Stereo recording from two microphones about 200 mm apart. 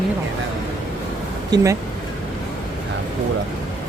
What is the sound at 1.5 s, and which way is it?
Speech, 20° right (ahead or behind).